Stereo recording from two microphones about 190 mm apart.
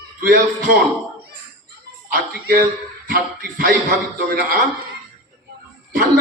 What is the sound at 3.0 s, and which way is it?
Speech, 50° right (ahead or behind).